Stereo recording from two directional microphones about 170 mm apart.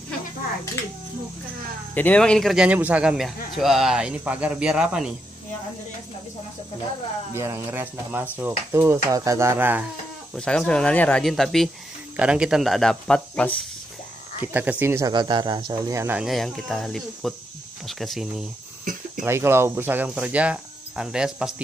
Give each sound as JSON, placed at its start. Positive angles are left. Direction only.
{"t": 2.0, "sound": "a man's voice", "side_deg": 10}
{"t": 7.3, "sound": "speech", "side_deg": -15}
{"t": 10.3, "sound": "a man's voice", "side_deg": 5}
{"t": 14.4, "sound": "speech", "side_deg": -10}
{"t": 16.2, "sound": "a man's voice", "side_deg": 0}
{"t": 19.2, "sound": "speech", "side_deg": -15}